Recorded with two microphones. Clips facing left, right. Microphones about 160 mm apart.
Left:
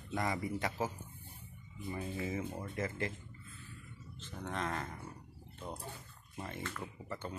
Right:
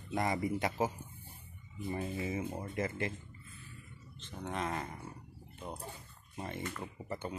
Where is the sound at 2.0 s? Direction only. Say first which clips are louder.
Right 1 dB; 15° right (ahead or behind).